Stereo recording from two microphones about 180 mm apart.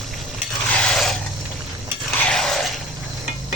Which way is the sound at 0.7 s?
5° left (ahead or behind).